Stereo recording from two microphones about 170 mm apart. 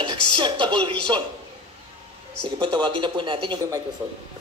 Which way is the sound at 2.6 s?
30° right (ahead or behind).